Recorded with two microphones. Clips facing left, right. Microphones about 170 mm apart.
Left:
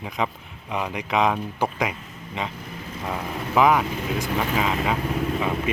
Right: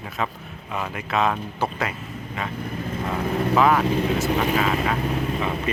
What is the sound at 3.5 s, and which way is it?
Speech, 15° left (ahead or behind).